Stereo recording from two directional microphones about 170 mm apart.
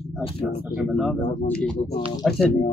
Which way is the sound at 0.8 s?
Centre (ahead or behind).